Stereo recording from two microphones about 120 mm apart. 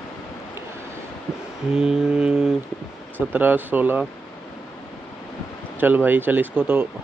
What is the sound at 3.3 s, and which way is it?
Speech, 15° right (ahead or behind).